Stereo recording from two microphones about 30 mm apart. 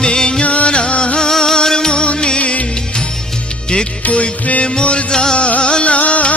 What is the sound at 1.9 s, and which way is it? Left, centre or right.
Music, left.